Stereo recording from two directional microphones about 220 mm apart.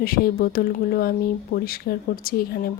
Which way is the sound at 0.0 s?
45° left (ahead or behind).